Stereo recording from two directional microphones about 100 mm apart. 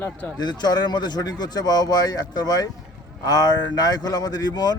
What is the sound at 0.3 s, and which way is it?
A man's voice, 45° left (ahead or behind).